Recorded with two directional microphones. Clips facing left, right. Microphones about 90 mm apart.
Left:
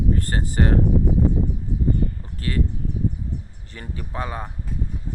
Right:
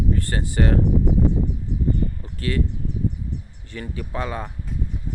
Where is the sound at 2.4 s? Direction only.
35° left (ahead or behind).